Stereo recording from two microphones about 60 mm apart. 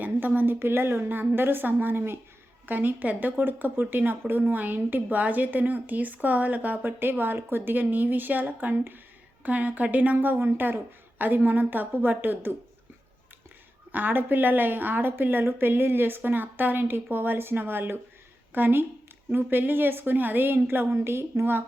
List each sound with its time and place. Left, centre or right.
0.0 s a woman's voice: right
13.9 s a woman's voice: right